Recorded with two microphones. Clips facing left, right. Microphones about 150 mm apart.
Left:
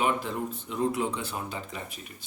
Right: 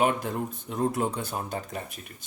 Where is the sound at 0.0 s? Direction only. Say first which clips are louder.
Right 2 dB; 50° right (ahead or behind).